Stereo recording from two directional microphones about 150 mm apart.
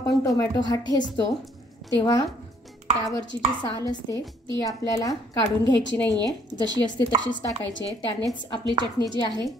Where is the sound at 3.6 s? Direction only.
30° left (ahead or behind).